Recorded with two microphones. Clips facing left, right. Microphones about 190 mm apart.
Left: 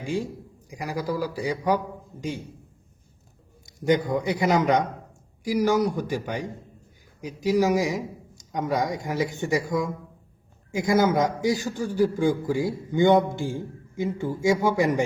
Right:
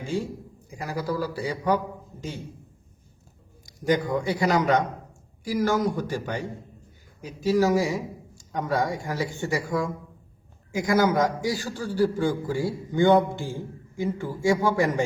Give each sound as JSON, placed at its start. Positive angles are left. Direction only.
{"t": 0.7, "sound": "a man's voice", "side_deg": 15}
{"t": 3.7, "sound": "a man's voice", "side_deg": 20}